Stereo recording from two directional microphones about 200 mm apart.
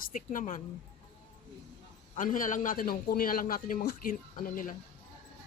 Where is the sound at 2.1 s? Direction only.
40° left (ahead or behind).